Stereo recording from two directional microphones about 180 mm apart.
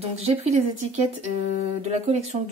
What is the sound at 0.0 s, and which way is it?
Speech, 35° right (ahead or behind).